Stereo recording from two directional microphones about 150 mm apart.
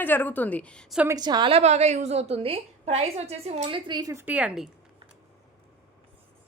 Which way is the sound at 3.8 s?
25° right (ahead or behind).